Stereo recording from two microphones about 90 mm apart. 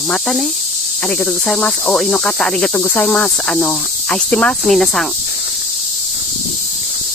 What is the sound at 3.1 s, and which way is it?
Speech, 5° left (ahead or behind).